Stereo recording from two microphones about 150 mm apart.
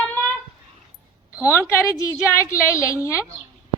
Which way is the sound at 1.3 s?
10° right (ahead or behind).